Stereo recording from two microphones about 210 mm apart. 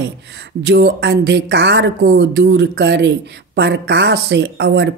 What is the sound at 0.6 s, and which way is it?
Speech, 55° right (ahead or behind).